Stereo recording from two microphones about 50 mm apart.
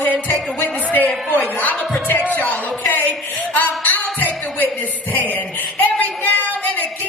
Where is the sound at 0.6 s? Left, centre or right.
Left.